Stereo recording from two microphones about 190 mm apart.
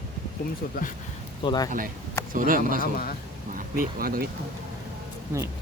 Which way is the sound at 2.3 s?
45° right (ahead or behind).